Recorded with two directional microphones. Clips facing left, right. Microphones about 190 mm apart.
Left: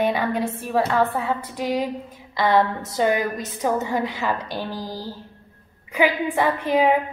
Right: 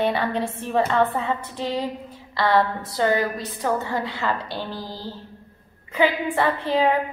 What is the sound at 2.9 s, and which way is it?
A woman's voice, 15° left (ahead or behind).